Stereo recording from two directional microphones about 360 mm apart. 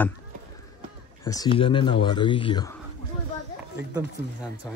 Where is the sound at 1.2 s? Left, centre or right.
Centre.